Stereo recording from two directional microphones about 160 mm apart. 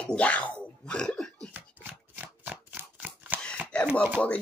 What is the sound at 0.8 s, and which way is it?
Throat clearing, 5° left (ahead or behind).